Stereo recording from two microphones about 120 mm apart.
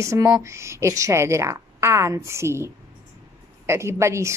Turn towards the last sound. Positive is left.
turn(degrees=-25)  # may be behind; listen again after turning